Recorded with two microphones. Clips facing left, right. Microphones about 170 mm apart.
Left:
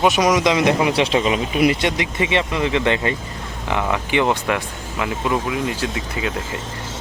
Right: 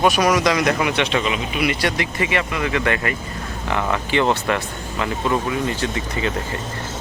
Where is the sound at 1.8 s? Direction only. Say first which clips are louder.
Left 1 dB; 20° left (ahead or behind).